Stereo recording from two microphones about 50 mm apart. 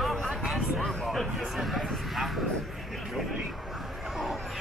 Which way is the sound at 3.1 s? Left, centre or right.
Centre.